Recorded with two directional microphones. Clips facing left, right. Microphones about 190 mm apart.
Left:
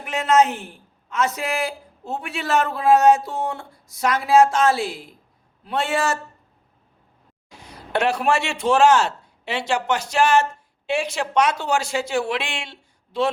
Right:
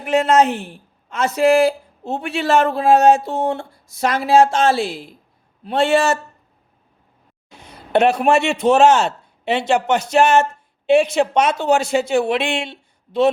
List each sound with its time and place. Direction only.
0.1 s a woman's voice: 30° right (ahead or behind)
7.5 s a man's voice: 25° right (ahead or behind)